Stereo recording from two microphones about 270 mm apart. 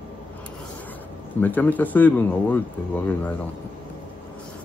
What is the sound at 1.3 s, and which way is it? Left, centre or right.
Speech, centre.